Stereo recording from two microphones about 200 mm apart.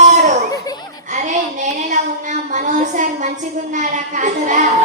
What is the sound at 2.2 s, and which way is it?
A woman's voice, 40° right (ahead or behind).